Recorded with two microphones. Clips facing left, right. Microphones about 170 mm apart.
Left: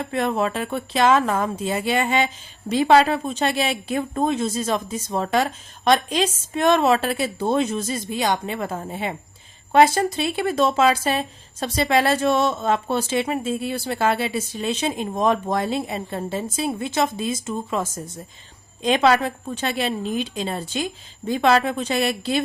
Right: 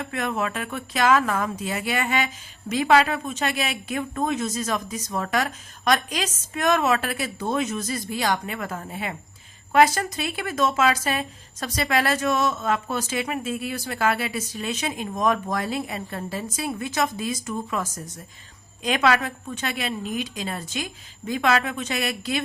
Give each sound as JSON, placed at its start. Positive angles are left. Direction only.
{"t": 0.0, "sound": "a woman's voice", "side_deg": 30}